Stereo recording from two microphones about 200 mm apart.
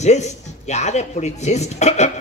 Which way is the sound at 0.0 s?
35° left (ahead or behind).